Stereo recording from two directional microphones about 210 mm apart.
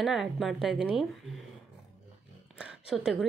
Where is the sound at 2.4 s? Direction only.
5° right (ahead or behind).